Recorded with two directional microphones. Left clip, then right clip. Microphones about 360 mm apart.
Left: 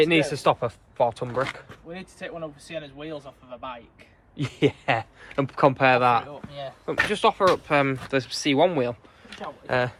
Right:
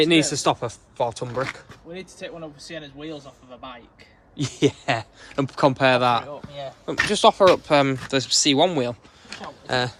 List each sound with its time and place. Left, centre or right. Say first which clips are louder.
0.0 s speech: right 1 dB; centre
1.9 s speech: right 1 dB; centre
4.4 s speech: right 2 dB; centre